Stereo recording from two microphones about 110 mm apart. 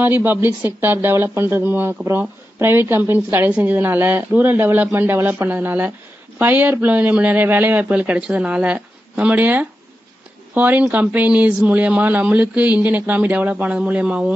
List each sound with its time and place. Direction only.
0.0 s speech: 15° right (ahead or behind)